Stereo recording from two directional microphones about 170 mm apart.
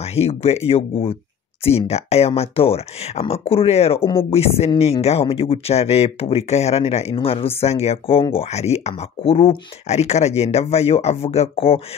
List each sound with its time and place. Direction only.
0.1 s speech: 35° left (ahead or behind)